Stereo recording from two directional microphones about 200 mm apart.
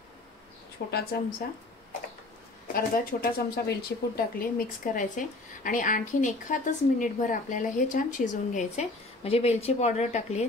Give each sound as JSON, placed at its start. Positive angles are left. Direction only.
{"t": 0.8, "sound": "a woman's voice", "side_deg": 60}
{"t": 1.4, "sound": "speech", "side_deg": 45}
{"t": 2.7, "sound": "speech", "side_deg": 45}